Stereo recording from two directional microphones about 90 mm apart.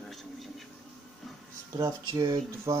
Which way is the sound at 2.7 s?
35° right (ahead or behind).